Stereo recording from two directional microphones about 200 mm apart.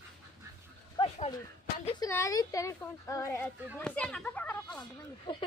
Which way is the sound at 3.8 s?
5° left (ahead or behind).